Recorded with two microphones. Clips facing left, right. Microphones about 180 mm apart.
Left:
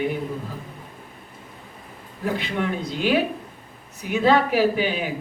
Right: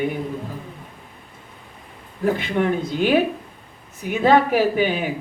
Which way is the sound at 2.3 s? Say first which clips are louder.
Right 4 dB; 50° right (ahead or behind).